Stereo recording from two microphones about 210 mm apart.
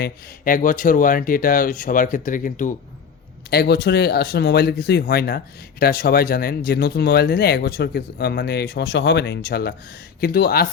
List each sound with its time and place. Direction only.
0.0 s speech: 40° left (ahead or behind)
3.5 s speech: 50° left (ahead or behind)